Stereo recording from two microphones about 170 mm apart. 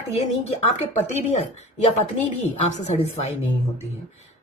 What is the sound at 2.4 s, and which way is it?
Speech, 40° left (ahead or behind).